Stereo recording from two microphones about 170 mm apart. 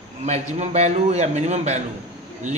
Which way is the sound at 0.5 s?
40° right (ahead or behind).